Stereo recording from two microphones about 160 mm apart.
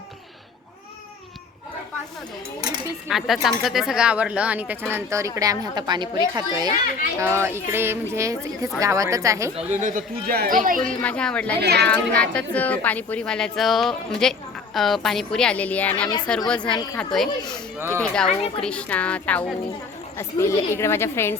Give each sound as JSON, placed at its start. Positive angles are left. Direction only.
{"t": 2.6, "sound": "a woman's voice", "side_deg": -25}
{"t": 3.1, "sound": "a woman's voice", "side_deg": 0}
{"t": 7.2, "sound": "a woman's voice", "side_deg": -15}
{"t": 9.6, "sound": "speech", "side_deg": -50}
{"t": 10.8, "sound": "a woman's voice", "side_deg": 5}
{"t": 11.6, "sound": "speech", "side_deg": -90}
{"t": 11.9, "sound": "speech", "side_deg": 10}
{"t": 16.6, "sound": "speech", "side_deg": 30}
{"t": 17.0, "sound": "speech", "side_deg": 0}
{"t": 17.7, "sound": "speech", "side_deg": -15}
{"t": 18.0, "sound": "a woman's voice", "side_deg": 5}